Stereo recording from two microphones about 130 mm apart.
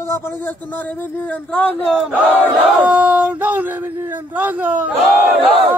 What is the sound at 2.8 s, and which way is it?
Speech, 10° right (ahead or behind).